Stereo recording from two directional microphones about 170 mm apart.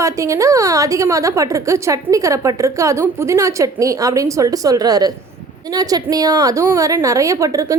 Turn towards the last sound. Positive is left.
turn(degrees=-20)  # may be behind; listen again after turning